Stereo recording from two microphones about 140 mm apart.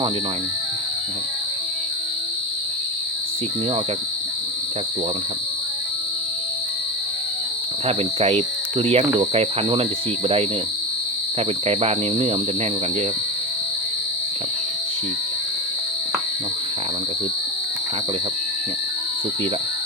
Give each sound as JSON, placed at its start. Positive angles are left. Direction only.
{"t": 7.9, "sound": "speech", "side_deg": -45}
{"t": 11.3, "sound": "speech", "side_deg": -45}